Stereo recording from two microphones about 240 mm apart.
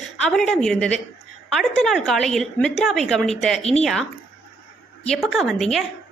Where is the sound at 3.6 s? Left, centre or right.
Left.